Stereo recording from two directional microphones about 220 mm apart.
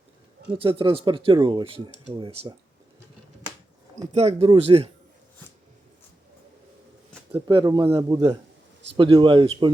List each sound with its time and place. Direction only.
0.6 s speech: 25° right (ahead or behind)
4.1 s speech: 30° right (ahead or behind)
7.3 s speech: 15° right (ahead or behind)